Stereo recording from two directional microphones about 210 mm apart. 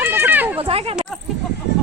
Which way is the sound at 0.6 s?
25° right (ahead or behind).